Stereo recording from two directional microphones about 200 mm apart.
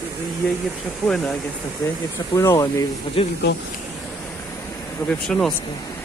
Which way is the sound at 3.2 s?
30° left (ahead or behind).